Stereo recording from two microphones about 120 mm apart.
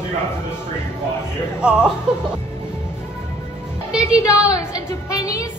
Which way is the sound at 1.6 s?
10° right (ahead or behind).